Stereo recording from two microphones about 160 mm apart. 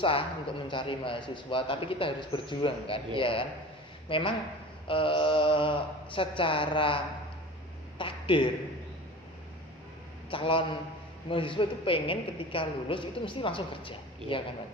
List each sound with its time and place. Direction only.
0.0 s a man's voice: 35° left (ahead or behind)
10.2 s a man's voice: 35° left (ahead or behind)